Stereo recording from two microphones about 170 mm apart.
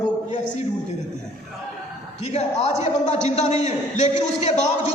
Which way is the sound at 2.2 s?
40° left (ahead or behind).